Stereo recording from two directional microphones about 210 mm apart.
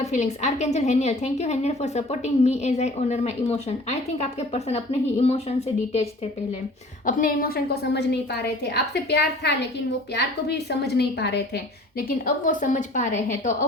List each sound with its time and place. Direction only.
0.0 s a woman's voice: 35° left (ahead or behind)